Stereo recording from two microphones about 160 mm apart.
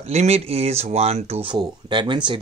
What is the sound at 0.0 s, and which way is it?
Speech, 40° right (ahead or behind).